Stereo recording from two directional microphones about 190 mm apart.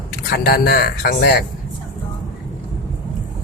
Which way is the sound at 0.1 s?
55° left (ahead or behind).